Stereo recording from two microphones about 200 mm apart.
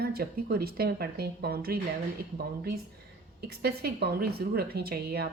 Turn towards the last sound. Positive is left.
turn(degrees=-50)  # may be behind; listen again after turning